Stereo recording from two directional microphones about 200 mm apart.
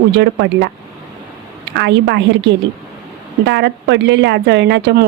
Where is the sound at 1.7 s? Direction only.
65° right (ahead or behind).